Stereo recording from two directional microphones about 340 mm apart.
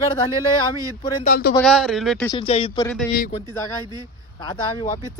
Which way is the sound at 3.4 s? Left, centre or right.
Centre.